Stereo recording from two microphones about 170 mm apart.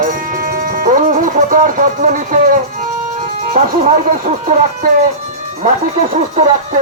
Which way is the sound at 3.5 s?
50° right (ahead or behind).